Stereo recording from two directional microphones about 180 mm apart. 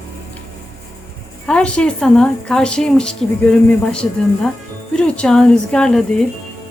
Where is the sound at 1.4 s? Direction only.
5° left (ahead or behind).